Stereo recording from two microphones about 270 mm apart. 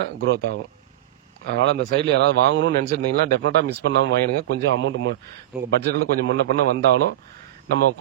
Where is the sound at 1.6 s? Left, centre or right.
Right.